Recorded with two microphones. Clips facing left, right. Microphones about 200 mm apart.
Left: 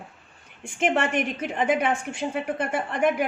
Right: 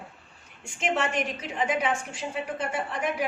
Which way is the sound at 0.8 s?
55° left (ahead or behind).